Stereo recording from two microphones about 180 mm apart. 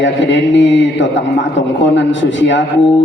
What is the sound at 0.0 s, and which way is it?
A man's voice, 85° left.